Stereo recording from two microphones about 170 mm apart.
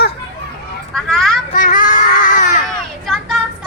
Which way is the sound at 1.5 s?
50° left (ahead or behind).